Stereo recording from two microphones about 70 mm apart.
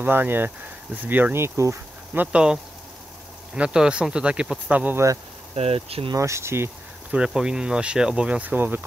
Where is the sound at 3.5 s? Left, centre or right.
Centre.